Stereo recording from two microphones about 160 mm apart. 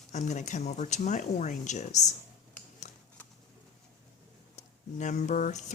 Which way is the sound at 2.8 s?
50° left (ahead or behind).